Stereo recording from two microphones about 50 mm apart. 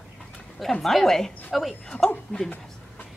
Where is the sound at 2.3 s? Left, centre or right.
Left.